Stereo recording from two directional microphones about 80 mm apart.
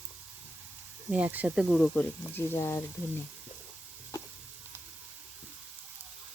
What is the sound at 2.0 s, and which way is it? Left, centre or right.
Speech, left.